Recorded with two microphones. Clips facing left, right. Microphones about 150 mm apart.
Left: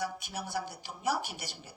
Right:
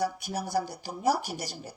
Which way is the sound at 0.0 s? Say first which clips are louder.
Right 6 dB; 40° right (ahead or behind).